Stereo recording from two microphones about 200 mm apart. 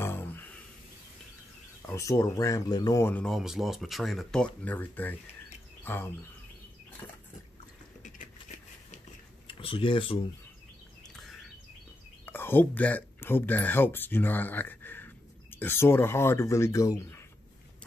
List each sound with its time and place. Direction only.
0.0 s snort: 10° left (ahead or behind)
1.9 s speech: 15° left (ahead or behind)
9.5 s speech: 25° left (ahead or behind)
12.3 s speech: 10° left (ahead or behind)